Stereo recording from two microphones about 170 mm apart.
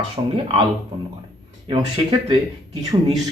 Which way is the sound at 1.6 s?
25° right (ahead or behind).